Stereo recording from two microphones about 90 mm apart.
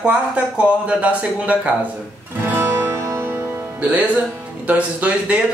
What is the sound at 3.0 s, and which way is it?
Music, 30° right (ahead or behind).